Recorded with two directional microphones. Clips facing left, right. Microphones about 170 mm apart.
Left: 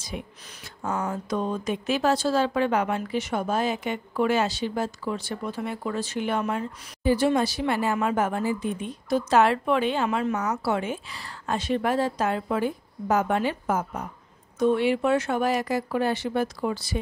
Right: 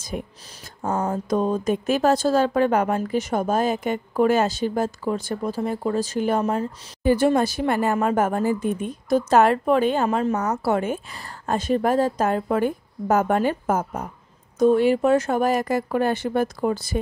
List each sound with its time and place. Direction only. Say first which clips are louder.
0.1 s a woman's voice: right 5 dB; 45° right (ahead or behind)